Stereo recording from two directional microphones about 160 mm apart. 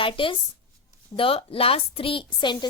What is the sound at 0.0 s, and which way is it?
A woman's voice, 35° left (ahead or behind).